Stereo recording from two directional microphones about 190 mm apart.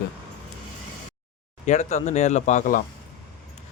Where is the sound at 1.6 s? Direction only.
40° left (ahead or behind).